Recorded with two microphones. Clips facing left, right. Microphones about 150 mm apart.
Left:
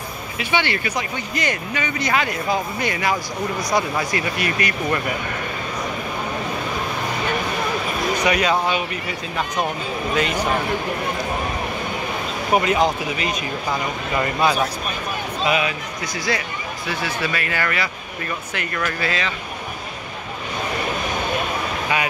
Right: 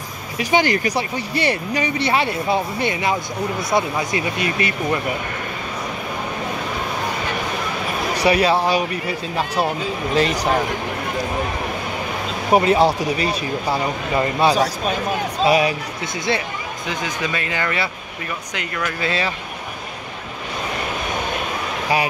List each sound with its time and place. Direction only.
0.4 s speech: 40° right (ahead or behind); by 5.0 s 25° right (ahead or behind)
8.2 s speech: 30° right (ahead or behind)
10.1 s speech: 35° right (ahead or behind)
12.5 s speech: 35° right (ahead or behind)
16.3 s speech: 20° right (ahead or behind)